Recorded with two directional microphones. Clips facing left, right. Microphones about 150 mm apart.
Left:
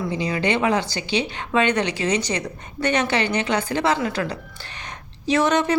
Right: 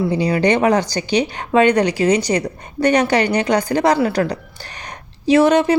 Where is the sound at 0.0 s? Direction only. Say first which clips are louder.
Right 7 dB; 35° right (ahead or behind).